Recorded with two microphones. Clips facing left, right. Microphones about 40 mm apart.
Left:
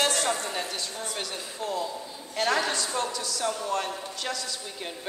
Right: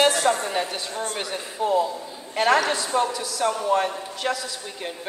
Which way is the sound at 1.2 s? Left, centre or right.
Right.